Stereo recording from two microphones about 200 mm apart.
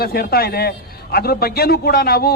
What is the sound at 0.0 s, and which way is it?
A man's voice, 50° left (ahead or behind).